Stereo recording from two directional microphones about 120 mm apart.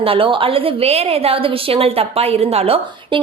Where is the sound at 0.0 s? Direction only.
50° right (ahead or behind).